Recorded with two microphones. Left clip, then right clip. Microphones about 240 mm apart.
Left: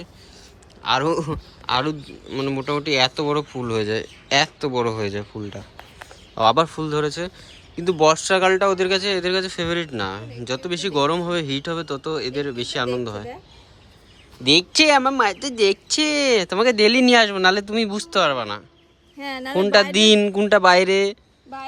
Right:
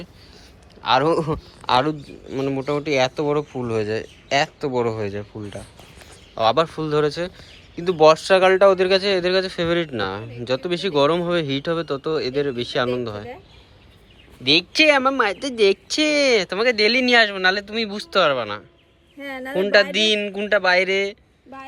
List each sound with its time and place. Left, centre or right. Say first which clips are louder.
0.8 s a man's voice: right 3 dB; centre
14.4 s speech: even; left
19.2 s a woman's voice: left 2 dB; left
19.5 s speech: left 1 dB; centre